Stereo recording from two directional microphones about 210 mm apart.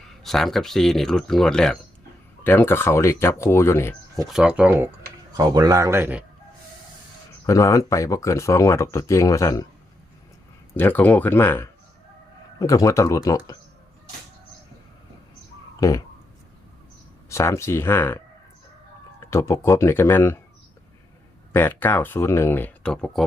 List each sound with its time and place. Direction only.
0.1 s speech: centre (ahead or behind)
4.3 s a man's voice: 5° right (ahead or behind)
7.4 s speech: 15° left (ahead or behind)
10.8 s speech: 10° left (ahead or behind)
15.8 s speech: 15° left (ahead or behind)
17.2 s speech: 15° left (ahead or behind)
19.3 s speech: 10° left (ahead or behind)
21.5 s speech: 10° left (ahead or behind)